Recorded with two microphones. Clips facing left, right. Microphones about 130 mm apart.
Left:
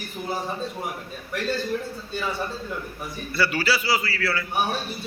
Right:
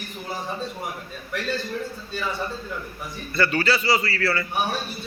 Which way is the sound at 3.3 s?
10° left (ahead or behind).